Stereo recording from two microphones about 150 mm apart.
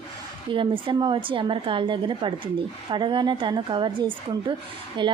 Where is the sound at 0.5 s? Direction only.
35° right (ahead or behind).